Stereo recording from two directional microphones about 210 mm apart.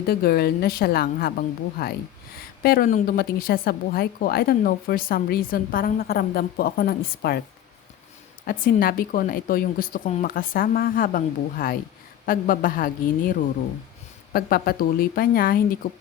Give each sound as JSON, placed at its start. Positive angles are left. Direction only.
{"t": 0.1, "sound": "a woman's voice", "side_deg": 45}
{"t": 8.4, "sound": "a woman's voice", "side_deg": 45}
{"t": 14.3, "sound": "a woman's voice", "side_deg": 45}